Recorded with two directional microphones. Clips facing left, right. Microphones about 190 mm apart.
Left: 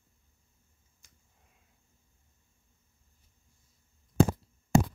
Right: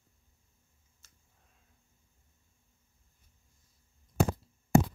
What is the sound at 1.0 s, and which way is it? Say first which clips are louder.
Finger snapping: left 2 dB; 15° left (ahead or behind).